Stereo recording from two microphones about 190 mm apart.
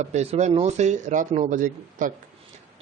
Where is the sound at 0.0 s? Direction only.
35° right (ahead or behind).